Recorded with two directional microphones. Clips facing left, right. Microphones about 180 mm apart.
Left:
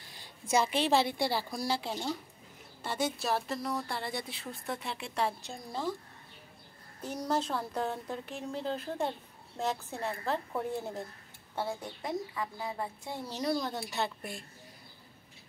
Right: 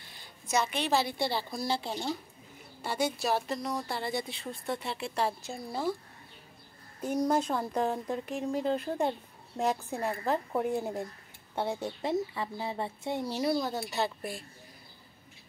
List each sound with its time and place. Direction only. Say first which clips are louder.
0.0 s a sound: left 2 dB; 35° left (ahead or behind)
1.1 s speech: even; 10° left (ahead or behind); by 5.9 s 10° right (ahead or behind)
7.1 s speech: right 5 dB; 10° right (ahead or behind)
11.5 s speech: right 4 dB; 25° right (ahead or behind)
13.2 s speech: right 2 dB; 10° right (ahead or behind)